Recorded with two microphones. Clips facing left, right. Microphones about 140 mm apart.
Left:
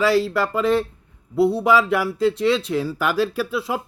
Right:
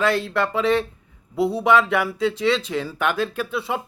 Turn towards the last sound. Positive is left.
turn(degrees=0)  # may be behind; listen again after turning